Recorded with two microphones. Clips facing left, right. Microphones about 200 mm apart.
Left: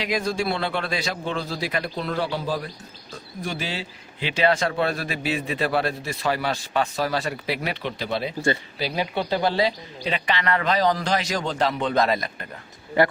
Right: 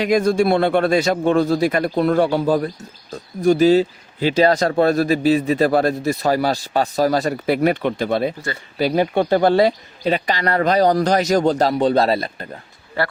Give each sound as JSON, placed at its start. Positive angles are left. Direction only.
{"t": 0.0, "sound": "a man's voice", "side_deg": -50}
{"t": 13.0, "sound": "speech", "side_deg": 15}